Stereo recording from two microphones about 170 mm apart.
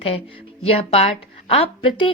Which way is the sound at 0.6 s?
35° left (ahead or behind).